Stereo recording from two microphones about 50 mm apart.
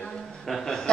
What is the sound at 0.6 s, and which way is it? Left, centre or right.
Chuckle, centre.